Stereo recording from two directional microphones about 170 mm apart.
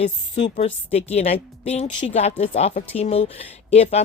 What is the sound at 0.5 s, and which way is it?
A woman's voice, 40° left (ahead or behind).